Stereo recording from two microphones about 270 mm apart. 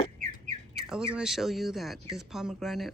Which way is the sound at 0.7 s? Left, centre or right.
Centre.